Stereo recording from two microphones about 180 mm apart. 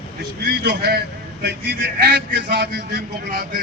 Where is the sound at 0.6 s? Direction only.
65° right (ahead or behind).